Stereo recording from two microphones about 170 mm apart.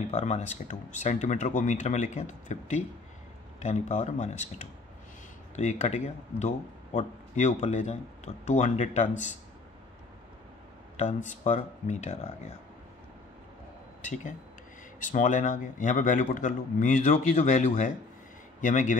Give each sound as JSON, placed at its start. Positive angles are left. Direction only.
{"t": 0.1, "sound": "speech", "side_deg": 45}
{"t": 11.0, "sound": "speech", "side_deg": 45}
{"t": 14.0, "sound": "speech", "side_deg": 45}